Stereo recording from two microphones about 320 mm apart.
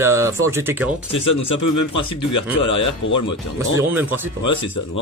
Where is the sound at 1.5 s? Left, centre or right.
Left.